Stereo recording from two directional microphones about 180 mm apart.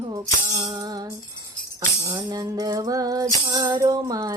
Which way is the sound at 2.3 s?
20° right (ahead or behind).